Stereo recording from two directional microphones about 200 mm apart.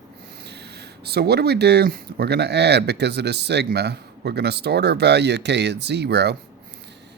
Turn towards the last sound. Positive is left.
turn(degrees=-55)  # may be behind; listen again after turning